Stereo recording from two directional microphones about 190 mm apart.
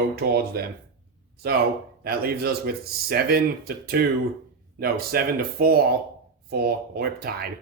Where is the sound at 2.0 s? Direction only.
55° right (ahead or behind).